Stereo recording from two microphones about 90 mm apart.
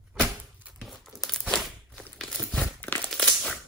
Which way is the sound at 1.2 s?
5° left (ahead or behind).